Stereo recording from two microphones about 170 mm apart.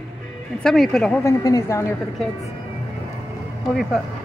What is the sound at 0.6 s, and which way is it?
Speech, 5° left (ahead or behind).